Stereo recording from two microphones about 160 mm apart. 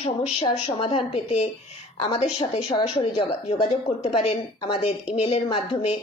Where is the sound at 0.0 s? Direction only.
35° left (ahead or behind).